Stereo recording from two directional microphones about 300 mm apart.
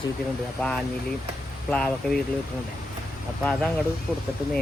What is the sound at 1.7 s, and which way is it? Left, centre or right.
Speech, centre.